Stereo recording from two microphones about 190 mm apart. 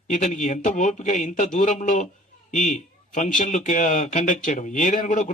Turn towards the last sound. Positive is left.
turn(degrees=40)  # may be behind; listen again after turning